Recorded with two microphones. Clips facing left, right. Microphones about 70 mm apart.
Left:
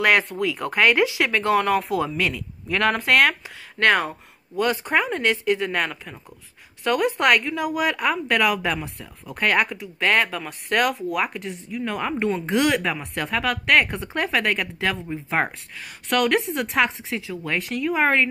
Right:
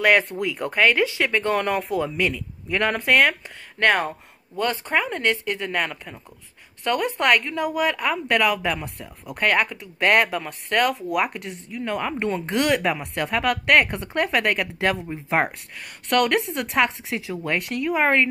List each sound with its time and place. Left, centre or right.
0.0 s a woman's voice: centre
1.3 s a woman's voice: centre
4.6 s a woman's voice: centre
9.5 s speech: centre
9.9 s a woman's voice: centre
14.4 s speech: centre
16.1 s a woman's voice: centre
17.3 s speech: centre
17.6 s a woman's voice: centre